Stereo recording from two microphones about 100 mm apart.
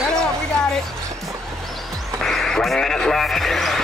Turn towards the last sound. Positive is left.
turn(degrees=0)  # may be behind; listen again after turning